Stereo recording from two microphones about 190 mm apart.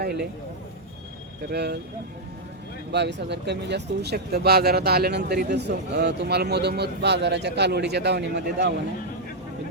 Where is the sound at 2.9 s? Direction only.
65° right (ahead or behind).